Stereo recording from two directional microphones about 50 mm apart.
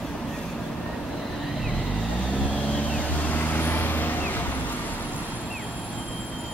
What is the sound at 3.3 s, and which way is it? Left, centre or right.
Vehicle, left.